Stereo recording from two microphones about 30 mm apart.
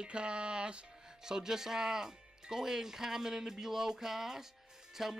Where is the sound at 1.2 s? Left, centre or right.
Centre.